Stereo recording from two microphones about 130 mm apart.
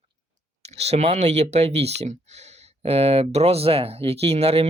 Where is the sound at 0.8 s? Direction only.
55° right (ahead or behind).